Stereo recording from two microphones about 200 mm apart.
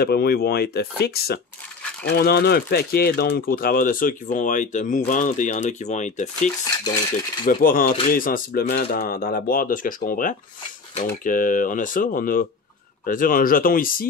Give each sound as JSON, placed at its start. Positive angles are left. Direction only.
{"t": 0.0, "sound": "speech", "side_deg": 50}